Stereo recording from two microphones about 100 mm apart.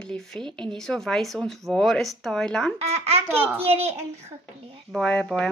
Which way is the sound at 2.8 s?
90° right.